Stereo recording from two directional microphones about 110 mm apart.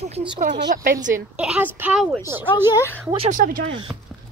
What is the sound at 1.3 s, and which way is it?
A woman's voice, 10° right (ahead or behind).